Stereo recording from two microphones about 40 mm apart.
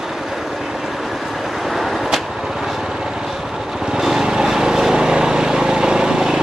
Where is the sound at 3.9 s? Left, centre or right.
Centre.